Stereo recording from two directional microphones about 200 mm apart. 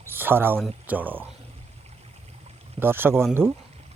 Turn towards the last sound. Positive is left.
turn(degrees=-10)  # may be behind; listen again after turning